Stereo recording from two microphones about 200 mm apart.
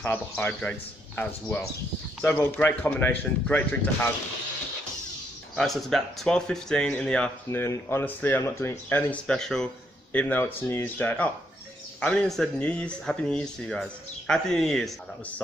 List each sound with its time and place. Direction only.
0.0 s speech: 10° left (ahead or behind)
5.6 s speech: centre (ahead or behind)